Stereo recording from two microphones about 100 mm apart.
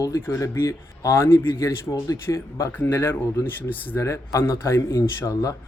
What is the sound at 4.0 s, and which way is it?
Speech, 30° left (ahead or behind).